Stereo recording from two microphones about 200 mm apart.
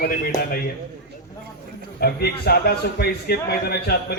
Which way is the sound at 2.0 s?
50° left (ahead or behind).